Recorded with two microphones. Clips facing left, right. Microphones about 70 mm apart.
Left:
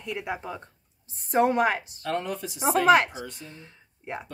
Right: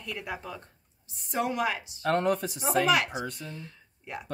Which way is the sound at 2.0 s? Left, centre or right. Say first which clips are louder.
Right 5 dB; right.